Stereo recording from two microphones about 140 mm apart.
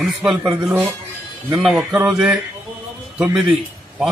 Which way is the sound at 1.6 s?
5° right (ahead or behind).